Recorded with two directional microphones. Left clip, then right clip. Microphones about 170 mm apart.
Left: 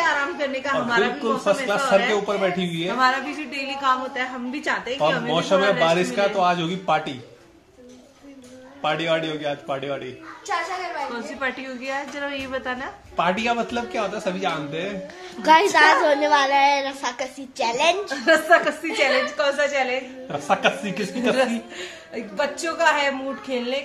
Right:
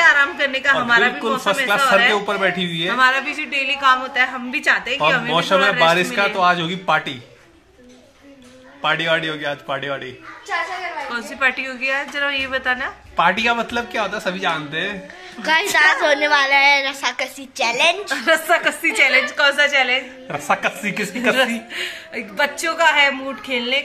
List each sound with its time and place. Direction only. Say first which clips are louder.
0.0 s a sound: right 8 dB; 15° left (ahead or behind)
0.8 s a woman's voice: right 5 dB; 15° left (ahead or behind)
2.0 s a man's voice: right 4 dB; 10° right (ahead or behind)
3.0 s a woman's voice: right 4 dB; 25° left (ahead or behind)
5.3 s a man's voice: right 3 dB; 10° right (ahead or behind)
8.8 s a man's voice: right 4 dB; 10° right (ahead or behind)
11.1 s a woman's voice: right 8 dB; 15° left (ahead or behind)
13.1 s a man's voice: right 5 dB; 10° right (ahead or behind)
15.4 s a woman's voice: left 3 dB; 40° left (ahead or behind)
15.7 s a woman's voice: right 1 dB; 25° left (ahead or behind)
18.1 s a woman's voice: even; centre (ahead or behind)
20.2 s a man's voice: even; 10° right (ahead or behind)
21.7 s a woman's voice: right 7 dB; 10° left (ahead or behind)